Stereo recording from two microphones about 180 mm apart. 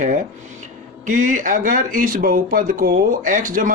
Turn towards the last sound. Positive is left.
turn(degrees=-50)  # may be behind; listen again after turning